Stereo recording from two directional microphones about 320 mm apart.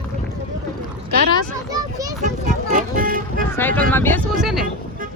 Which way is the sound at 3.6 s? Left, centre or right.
Centre.